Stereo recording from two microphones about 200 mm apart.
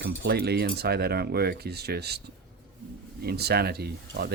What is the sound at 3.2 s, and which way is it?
Cutlery, 55° right (ahead or behind).